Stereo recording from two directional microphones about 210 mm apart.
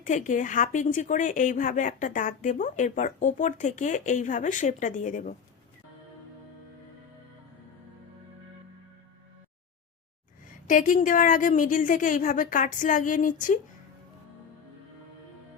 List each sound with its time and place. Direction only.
0.0 s a woman's voice: 35° left (ahead or behind)
10.7 s a woman's voice: 40° left (ahead or behind)